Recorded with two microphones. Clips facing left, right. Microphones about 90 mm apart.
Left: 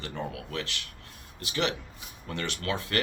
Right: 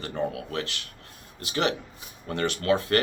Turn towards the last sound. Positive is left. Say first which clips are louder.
# right 7 dB
turn(degrees=-40)  # may be behind; listen again after turning